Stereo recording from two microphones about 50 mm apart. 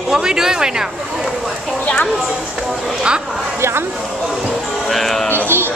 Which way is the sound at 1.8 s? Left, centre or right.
Centre.